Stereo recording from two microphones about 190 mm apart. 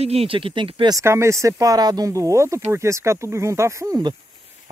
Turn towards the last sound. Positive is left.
turn(degrees=-20)  # may be behind; listen again after turning